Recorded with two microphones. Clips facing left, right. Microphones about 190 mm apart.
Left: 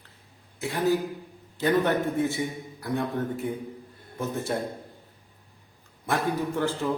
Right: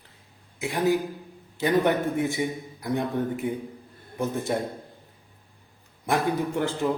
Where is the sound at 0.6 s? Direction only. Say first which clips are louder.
Right 1 dB; 15° right (ahead or behind).